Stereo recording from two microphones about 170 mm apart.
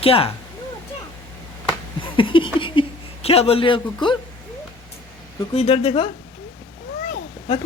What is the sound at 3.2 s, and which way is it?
Speech, 35° left (ahead or behind).